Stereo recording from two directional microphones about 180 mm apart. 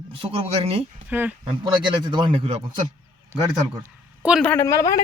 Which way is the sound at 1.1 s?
10° right (ahead or behind).